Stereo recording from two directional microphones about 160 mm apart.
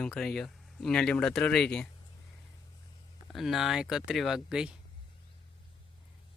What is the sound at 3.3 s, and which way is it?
Speech, centre (ahead or behind).